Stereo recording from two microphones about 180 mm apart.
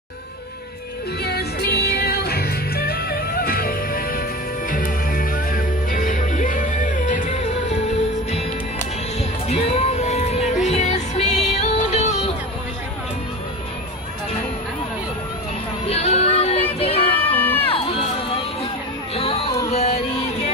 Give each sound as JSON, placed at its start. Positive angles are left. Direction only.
{"t": 1.2, "sound": "music", "side_deg": 60}
{"t": 9.5, "sound": "music", "side_deg": 35}
{"t": 15.9, "sound": "child singing", "side_deg": 35}
{"t": 17.6, "sound": "crowd", "side_deg": 30}
{"t": 19.1, "sound": "music", "side_deg": 35}